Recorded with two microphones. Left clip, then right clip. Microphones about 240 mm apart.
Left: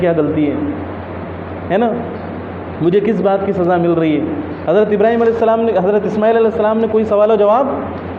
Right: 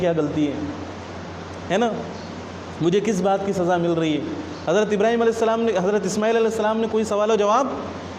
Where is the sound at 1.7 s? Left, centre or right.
Right.